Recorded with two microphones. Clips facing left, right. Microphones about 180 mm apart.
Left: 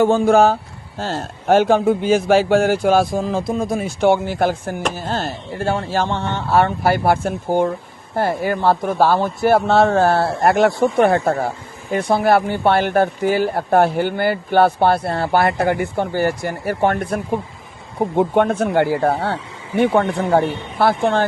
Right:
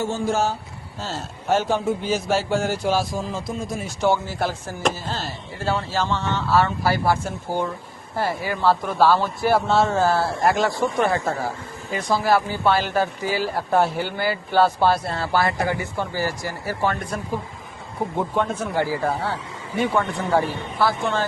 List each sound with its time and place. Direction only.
0.0 s speech: 60° left (ahead or behind)
18.2 s speech: 60° left (ahead or behind)